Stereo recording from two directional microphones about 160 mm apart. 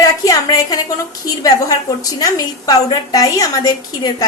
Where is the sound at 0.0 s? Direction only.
25° left (ahead or behind).